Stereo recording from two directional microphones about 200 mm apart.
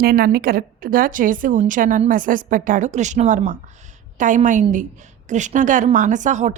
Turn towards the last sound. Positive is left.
turn(degrees=-35)  # may be behind; listen again after turning